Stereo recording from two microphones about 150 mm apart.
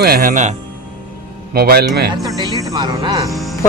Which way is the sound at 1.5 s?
90° right.